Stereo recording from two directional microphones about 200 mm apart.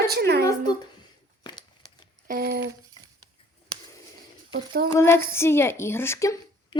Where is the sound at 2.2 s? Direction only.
50° right (ahead or behind).